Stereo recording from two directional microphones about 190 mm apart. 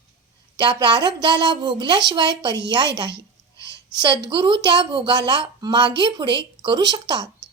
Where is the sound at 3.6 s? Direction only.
65° right (ahead or behind).